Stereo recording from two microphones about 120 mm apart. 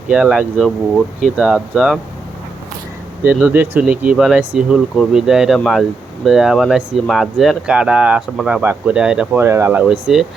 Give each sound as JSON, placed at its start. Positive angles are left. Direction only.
{"t": 0.1, "sound": "speech", "side_deg": -10}
{"t": 3.2, "sound": "speech", "side_deg": -15}
{"t": 9.4, "sound": "speech", "side_deg": -20}
{"t": 9.8, "sound": "speech", "side_deg": -5}